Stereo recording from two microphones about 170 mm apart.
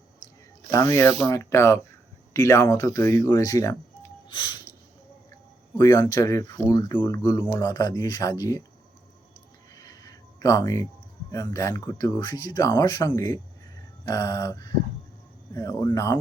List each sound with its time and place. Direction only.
0.7 s speech: 20° left (ahead or behind)
5.7 s speech: 20° left (ahead or behind)
9.8 s a sound: 20° left (ahead or behind)
11.3 s speech: 20° left (ahead or behind)